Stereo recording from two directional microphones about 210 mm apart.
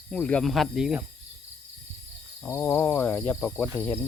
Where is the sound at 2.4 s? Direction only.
10° left (ahead or behind).